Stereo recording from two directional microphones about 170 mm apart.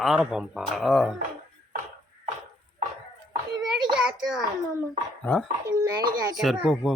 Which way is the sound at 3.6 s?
5° right (ahead or behind).